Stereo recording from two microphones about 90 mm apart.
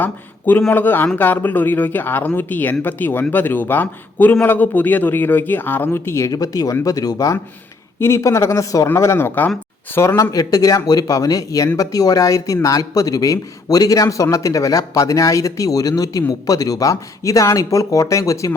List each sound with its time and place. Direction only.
0.0 s a man's voice: 20° left (ahead or behind)
6.3 s speech: 40° left (ahead or behind)
7.9 s a man's voice: 30° left (ahead or behind)
10.3 s speech: 45° left (ahead or behind)